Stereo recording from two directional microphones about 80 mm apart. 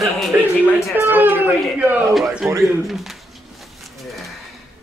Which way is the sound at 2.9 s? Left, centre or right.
Centre.